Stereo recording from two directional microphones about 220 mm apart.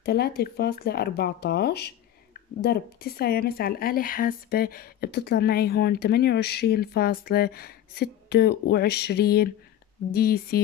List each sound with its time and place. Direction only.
0.0 s speech: 45° left (ahead or behind)